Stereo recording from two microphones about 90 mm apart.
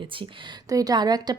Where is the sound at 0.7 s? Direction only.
45° right (ahead or behind).